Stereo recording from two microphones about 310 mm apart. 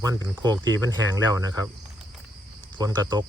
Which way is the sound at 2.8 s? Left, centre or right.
Centre.